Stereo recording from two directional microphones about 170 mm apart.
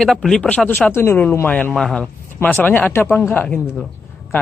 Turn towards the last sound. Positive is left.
turn(degrees=5)  # may be behind; listen again after turning